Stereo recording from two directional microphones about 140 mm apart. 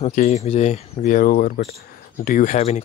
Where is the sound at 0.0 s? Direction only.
55° left (ahead or behind).